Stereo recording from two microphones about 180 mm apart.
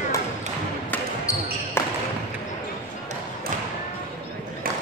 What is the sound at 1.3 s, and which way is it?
Basketball bounce, 15° left (ahead or behind).